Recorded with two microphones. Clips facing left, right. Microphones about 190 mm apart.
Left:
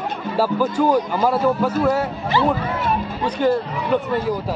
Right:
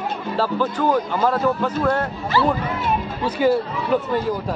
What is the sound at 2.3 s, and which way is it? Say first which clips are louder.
Speech: even; 20° left (ahead or behind).